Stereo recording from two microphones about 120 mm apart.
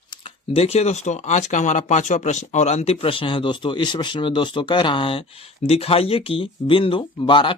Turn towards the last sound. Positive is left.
turn(degrees=45)  # may be behind; listen again after turning